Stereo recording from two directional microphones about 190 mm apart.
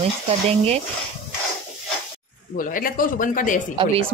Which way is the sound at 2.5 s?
45° left (ahead or behind).